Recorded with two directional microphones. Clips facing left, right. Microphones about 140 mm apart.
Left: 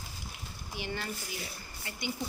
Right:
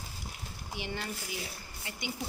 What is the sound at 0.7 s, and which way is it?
Speech, 20° right (ahead or behind).